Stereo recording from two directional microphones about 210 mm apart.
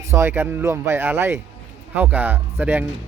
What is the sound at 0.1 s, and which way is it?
Speech, 10° right (ahead or behind).